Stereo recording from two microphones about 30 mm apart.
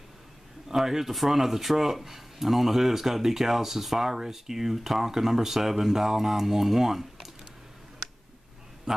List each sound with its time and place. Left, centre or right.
0.7 s speech: centre
8.9 s a man's voice: centre